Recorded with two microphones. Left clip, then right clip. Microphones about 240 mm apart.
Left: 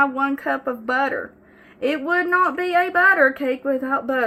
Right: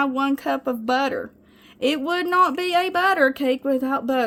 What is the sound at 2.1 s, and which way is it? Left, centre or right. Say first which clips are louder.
A woman's voice: left 1 dB; right.